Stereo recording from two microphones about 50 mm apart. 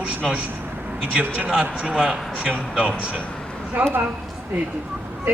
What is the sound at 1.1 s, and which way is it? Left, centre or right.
Speech, right.